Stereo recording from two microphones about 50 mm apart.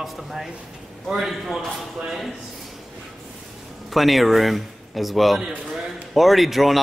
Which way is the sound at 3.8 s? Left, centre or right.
Centre.